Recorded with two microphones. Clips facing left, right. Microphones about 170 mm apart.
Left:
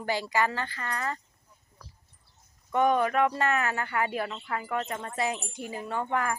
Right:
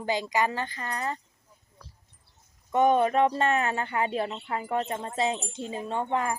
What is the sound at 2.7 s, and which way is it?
Speech, 20° right (ahead or behind).